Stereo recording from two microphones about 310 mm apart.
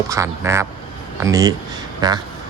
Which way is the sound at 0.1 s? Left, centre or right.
Centre.